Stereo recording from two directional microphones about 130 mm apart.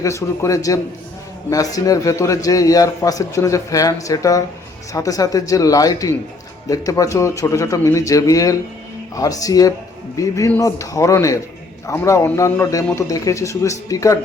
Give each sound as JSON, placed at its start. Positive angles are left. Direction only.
{"t": 0.0, "sound": "a man's voice", "side_deg": 25}